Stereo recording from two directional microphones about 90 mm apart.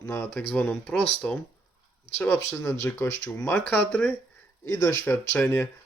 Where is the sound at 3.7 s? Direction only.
10° left (ahead or behind).